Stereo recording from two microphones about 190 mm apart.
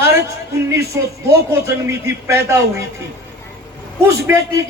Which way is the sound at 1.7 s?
15° right (ahead or behind).